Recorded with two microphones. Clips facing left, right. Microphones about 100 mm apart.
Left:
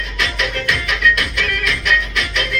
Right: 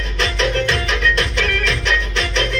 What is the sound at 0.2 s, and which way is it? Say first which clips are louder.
Music: right 4 dB; 35° right (ahead or behind).